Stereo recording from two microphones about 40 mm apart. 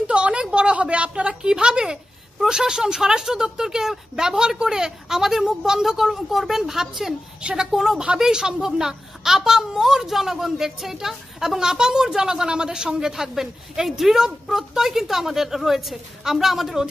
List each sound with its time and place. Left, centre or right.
0.0 s a sound: right
2.4 s a child's voice: centre
8.2 s a child's voice: centre